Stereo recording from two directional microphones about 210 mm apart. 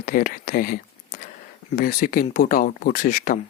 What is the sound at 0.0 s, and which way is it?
Speech, 45° left (ahead or behind).